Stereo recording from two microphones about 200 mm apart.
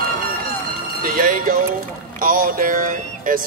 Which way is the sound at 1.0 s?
45° right (ahead or behind).